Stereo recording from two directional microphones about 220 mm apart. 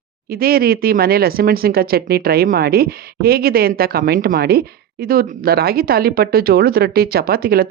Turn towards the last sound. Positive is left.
turn(degrees=-45)  # may be behind; listen again after turning